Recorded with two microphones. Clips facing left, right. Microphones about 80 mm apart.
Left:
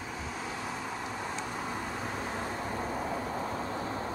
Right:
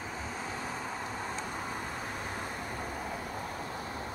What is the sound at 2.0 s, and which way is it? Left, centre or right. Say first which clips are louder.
Vehicle: left 3 dB; left.